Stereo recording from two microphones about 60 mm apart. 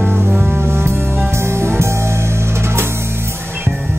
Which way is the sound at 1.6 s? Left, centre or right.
Right.